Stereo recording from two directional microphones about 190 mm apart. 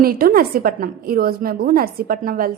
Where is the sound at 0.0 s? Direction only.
50° right (ahead or behind).